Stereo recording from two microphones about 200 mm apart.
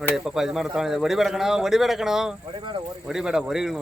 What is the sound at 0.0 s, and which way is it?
Speech, centre (ahead or behind).